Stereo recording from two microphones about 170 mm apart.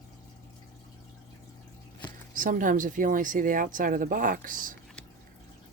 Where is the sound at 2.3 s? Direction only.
50° right (ahead or behind).